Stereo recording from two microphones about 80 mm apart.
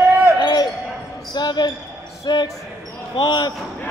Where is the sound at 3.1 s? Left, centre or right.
Left.